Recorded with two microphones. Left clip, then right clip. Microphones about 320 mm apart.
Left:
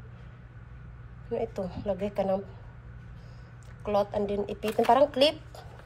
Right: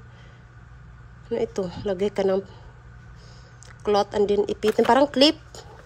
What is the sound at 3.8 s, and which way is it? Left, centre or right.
A woman's voice, right.